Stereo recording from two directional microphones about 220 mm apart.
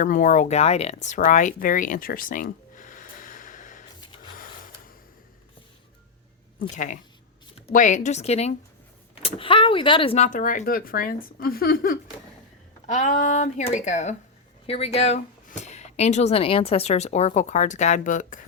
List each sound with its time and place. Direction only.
0.0 s speech: 35° left (ahead or behind)
6.6 s speech: 35° left (ahead or behind)